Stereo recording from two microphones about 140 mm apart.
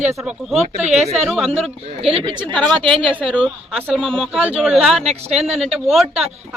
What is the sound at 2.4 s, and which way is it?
Speech, 5° left (ahead or behind).